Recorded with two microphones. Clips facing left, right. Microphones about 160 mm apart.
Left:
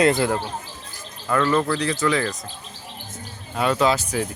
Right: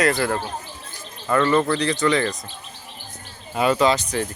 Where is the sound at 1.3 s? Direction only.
Centre (ahead or behind).